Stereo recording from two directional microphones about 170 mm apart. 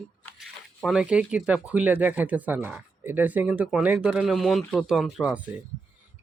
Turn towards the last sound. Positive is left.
turn(degrees=-10)  # may be behind; listen again after turning